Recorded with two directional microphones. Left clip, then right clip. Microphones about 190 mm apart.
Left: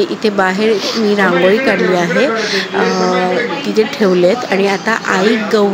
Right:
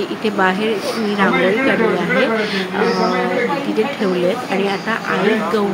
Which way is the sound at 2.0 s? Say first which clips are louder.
Left 3 dB; 20° left (ahead or behind).